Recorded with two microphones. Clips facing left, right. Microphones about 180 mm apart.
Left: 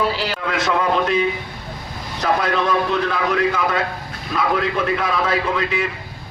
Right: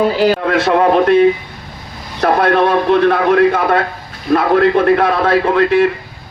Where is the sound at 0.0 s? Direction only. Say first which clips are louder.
Right 9 dB; 50° right (ahead or behind).